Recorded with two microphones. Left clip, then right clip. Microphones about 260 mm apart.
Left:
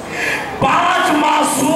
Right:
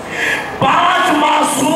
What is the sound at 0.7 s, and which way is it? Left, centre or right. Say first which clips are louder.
Music: right 2 dB; centre.